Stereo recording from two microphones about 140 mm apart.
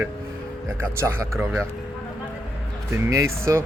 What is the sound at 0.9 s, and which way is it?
Speech, 20° right (ahead or behind).